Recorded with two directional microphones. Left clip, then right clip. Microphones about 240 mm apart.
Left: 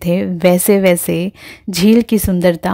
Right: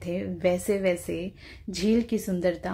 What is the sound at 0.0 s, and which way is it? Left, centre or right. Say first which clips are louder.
A woman's voice: left 13 dB; left.